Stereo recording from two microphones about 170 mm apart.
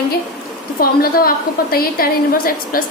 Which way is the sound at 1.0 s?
60° left (ahead or behind).